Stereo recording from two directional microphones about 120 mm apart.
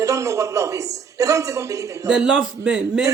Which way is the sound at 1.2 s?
25° right (ahead or behind).